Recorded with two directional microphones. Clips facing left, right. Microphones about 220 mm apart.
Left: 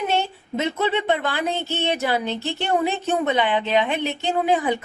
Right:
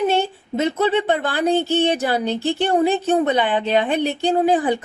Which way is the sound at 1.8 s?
35° right (ahead or behind).